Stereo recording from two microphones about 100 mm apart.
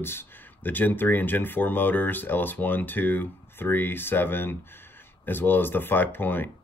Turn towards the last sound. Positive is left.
turn(degrees=20)  # may be behind; listen again after turning